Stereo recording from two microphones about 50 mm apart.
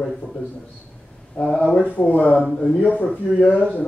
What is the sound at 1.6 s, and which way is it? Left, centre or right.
Speech, left.